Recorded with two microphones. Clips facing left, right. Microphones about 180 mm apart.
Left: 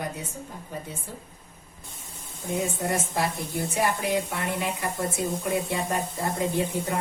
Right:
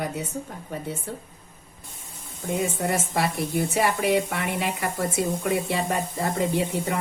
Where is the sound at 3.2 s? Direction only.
70° right (ahead or behind).